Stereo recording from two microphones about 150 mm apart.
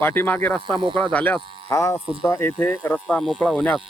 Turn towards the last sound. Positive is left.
turn(degrees=5)  # may be behind; listen again after turning